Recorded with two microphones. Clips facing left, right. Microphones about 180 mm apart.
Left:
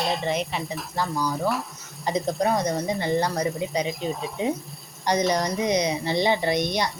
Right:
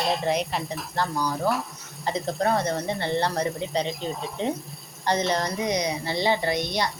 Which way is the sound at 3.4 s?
Centre (ahead or behind).